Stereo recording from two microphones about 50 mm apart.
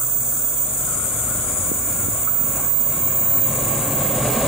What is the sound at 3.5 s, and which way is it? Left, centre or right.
Vehicle, centre.